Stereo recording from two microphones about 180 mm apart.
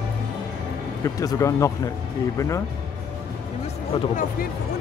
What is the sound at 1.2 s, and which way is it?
Speech, 20° left (ahead or behind).